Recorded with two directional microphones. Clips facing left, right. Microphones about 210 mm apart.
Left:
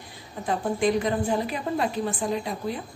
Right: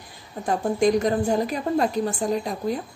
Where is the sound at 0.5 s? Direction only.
45° right (ahead or behind).